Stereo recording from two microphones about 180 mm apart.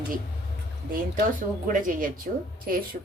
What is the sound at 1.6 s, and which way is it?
Speech, 50° right (ahead or behind).